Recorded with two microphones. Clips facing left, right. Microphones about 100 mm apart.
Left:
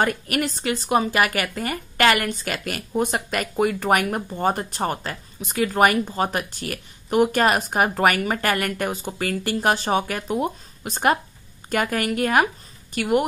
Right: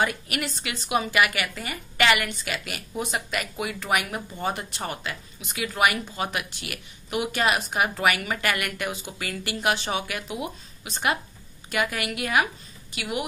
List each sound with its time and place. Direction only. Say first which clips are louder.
0.0 s a woman's voice: left 4 dB; 45° left (ahead or behind)